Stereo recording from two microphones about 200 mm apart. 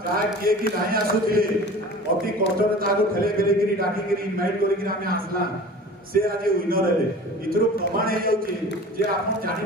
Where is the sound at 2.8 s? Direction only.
45° right (ahead or behind).